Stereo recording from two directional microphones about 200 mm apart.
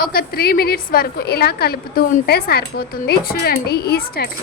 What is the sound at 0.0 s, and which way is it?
A woman's voice, 50° left (ahead or behind).